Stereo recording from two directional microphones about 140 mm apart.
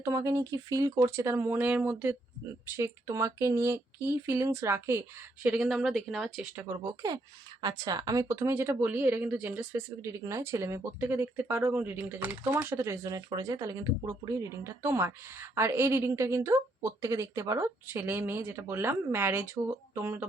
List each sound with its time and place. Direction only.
0.0 s speech: 20° right (ahead or behind)
5.5 s speech: centre (ahead or behind)
6.6 s speech: 20° right (ahead or behind)